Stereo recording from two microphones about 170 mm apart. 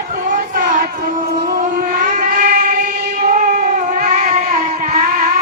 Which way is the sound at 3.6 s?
45° right (ahead or behind).